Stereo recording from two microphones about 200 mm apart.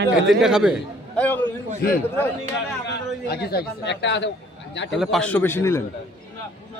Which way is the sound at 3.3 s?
50° left (ahead or behind).